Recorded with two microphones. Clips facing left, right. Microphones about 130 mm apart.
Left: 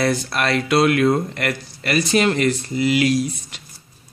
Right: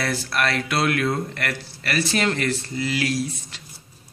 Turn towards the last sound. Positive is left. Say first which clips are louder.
# left 5 dB
turn(degrees=15)  # may be behind; listen again after turning